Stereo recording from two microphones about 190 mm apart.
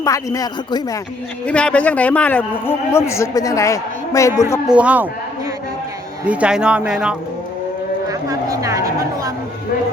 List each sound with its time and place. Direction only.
0.0 s speech: 15° left (ahead or behind)
1.5 s a man's voice: 5° left (ahead or behind)
4.7 s speech: 5° right (ahead or behind)
6.2 s speech: 5° right (ahead or behind)
8.0 s a sound: 15° right (ahead or behind)